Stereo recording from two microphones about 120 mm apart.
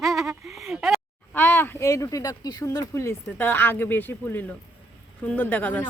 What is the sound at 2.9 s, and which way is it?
Speech, 20° left (ahead or behind).